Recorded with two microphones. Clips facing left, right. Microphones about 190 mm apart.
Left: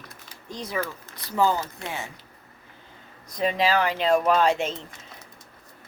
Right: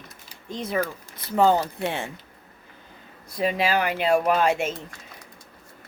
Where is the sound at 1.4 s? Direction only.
70° right (ahead or behind).